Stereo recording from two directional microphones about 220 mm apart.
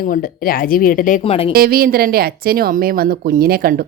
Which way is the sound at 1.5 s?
45° right (ahead or behind).